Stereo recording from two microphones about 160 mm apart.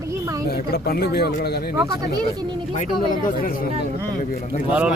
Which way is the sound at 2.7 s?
55° left (ahead or behind).